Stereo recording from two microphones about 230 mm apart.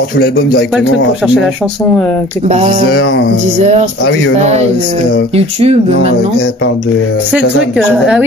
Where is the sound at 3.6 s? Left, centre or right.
Right.